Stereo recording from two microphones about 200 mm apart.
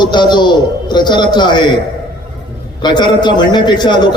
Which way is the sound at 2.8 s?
20° left (ahead or behind).